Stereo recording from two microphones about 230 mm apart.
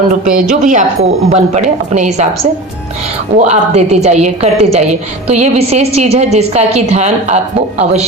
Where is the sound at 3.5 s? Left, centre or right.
Right.